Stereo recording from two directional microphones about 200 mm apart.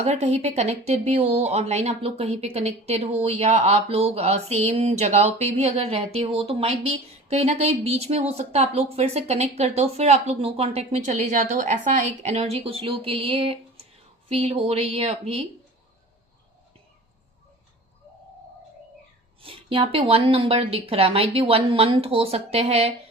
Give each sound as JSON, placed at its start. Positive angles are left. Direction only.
{"t": 0.0, "sound": "speech", "side_deg": -35}
{"t": 19.4, "sound": "a woman's voice", "side_deg": -25}